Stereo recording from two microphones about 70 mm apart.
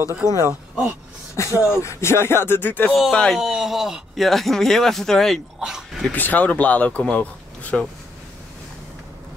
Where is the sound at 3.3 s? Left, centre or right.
Centre.